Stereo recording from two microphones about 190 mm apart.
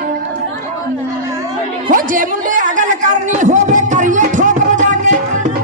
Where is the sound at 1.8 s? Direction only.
45° right (ahead or behind).